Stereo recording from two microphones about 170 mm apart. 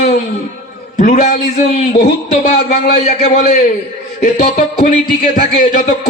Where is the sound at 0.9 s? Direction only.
45° left (ahead or behind).